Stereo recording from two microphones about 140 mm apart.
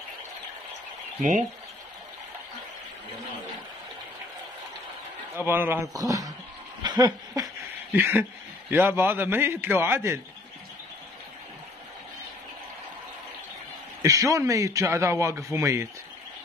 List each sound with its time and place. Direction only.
5.3 s a man's voice: 15° right (ahead or behind)
6.8 s a sound: 30° right (ahead or behind)
7.9 s a man's voice: 15° right (ahead or behind)
14.0 s a man's voice: 20° right (ahead or behind)